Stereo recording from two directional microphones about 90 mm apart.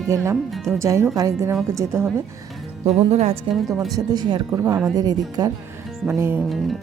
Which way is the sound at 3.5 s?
90° right.